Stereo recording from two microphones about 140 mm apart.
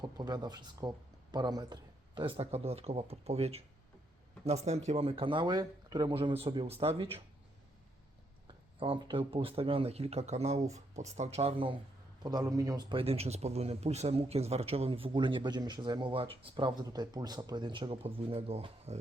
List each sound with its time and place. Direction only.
0.0 s speech: 30° right (ahead or behind)
8.8 s speech: 40° right (ahead or behind)
12.2 s speech: 30° right (ahead or behind); by 18.9 s 45° right (ahead or behind)